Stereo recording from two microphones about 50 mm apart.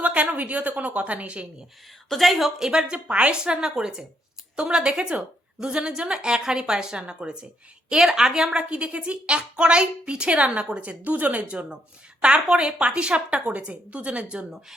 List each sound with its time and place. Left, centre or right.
0.0 s a woman's voice: right
2.0 s a woman's voice: centre; by 14.4 s right